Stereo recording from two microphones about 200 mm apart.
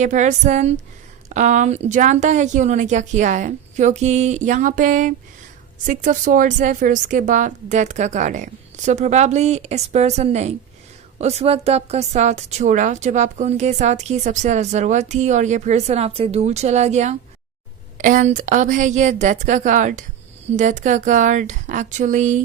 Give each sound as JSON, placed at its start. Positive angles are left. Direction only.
{"t": 0.0, "sound": "a woman's voice", "side_deg": -35}